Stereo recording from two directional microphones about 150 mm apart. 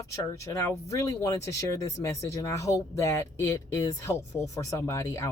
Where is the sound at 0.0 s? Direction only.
20° left (ahead or behind).